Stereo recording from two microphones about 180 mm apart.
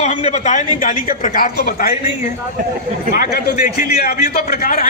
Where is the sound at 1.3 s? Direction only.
55° left (ahead or behind).